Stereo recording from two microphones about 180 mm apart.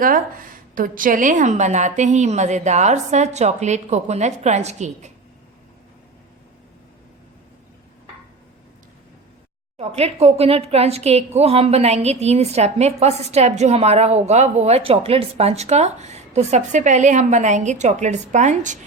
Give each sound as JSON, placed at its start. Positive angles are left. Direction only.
{"t": 0.0, "sound": "a woman's voice", "side_deg": -50}
{"t": 9.7, "sound": "a woman's voice", "side_deg": -35}